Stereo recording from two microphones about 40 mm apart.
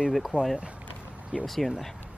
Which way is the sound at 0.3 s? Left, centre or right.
Right.